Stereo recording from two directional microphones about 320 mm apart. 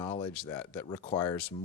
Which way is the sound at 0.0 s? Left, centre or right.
Centre.